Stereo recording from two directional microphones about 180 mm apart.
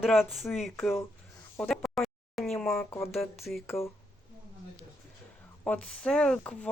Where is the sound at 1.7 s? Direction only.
Centre (ahead or behind).